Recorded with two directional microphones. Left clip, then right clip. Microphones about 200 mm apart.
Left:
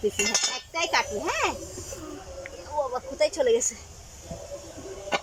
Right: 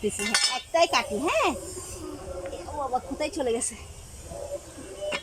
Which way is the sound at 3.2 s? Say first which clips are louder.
Left 9 dB; 10° right (ahead or behind).